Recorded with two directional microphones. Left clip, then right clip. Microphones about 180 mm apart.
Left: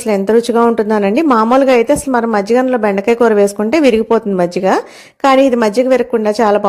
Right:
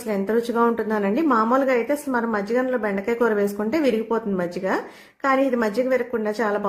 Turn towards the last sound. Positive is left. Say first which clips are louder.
# left 12 dB
turn(degrees=35)  # may be behind; listen again after turning